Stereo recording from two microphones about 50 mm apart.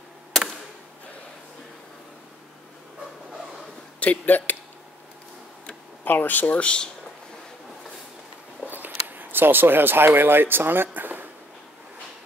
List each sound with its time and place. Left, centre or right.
4.0 s speech: left
6.0 s speech: left
8.6 s speech: right
10.9 s a sound: right